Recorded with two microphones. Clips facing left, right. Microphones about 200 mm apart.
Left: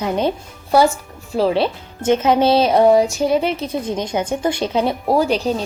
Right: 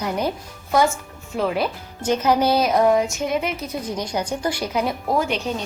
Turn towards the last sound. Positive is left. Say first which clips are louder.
# left 5 dB
turn(degrees=35)  # may be behind; listen again after turning